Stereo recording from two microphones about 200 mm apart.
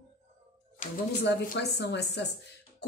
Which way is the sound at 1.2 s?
55° left (ahead or behind).